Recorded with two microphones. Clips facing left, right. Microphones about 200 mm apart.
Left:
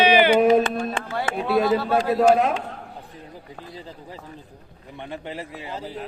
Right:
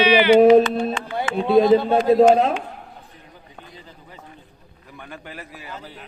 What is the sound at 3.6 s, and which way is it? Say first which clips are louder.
A man's voice: left 6 dB; 30° left (ahead or behind).